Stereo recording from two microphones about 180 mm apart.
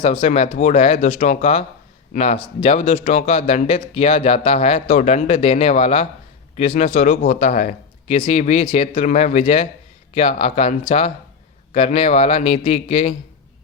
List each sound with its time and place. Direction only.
0.0 s speech: 30° left (ahead or behind)